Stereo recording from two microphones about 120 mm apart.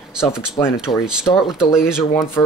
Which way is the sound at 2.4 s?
20° left (ahead or behind).